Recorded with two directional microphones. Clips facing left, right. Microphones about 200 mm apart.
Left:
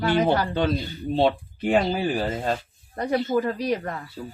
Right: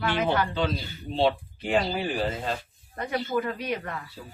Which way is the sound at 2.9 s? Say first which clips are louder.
Left 5 dB; 35° left (ahead or behind).